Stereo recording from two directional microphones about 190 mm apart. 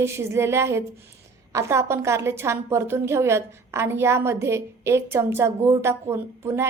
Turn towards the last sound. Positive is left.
turn(degrees=-15)  # may be behind; listen again after turning